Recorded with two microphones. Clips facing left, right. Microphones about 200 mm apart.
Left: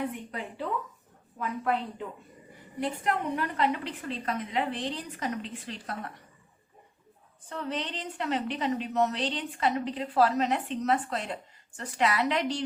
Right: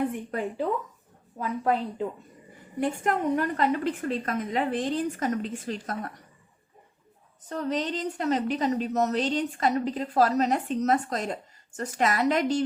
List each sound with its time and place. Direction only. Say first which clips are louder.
0.3 s a woman's voice: right 6 dB; 45° right (ahead or behind)
2.8 s a woman's voice: right 4 dB; 50° right (ahead or behind)
7.4 s a woman's voice: right 5 dB; 40° right (ahead or behind)